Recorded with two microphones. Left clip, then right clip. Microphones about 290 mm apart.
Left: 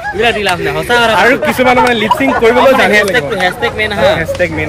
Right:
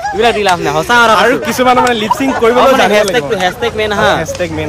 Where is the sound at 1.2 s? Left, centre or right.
Centre.